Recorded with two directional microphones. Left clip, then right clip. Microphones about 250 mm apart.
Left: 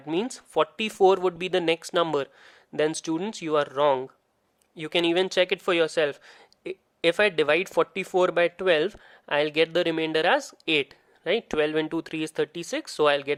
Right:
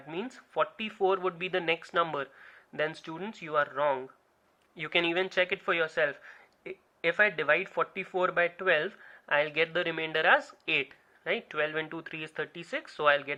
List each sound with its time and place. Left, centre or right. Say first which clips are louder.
0.1 s speech: left 10 dB; left